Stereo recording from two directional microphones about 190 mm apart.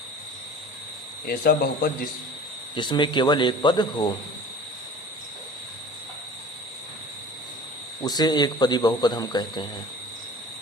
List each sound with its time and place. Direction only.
1.3 s speech: 50° left (ahead or behind)
2.7 s a man's voice: 25° left (ahead or behind)
8.0 s a man's voice: 20° left (ahead or behind)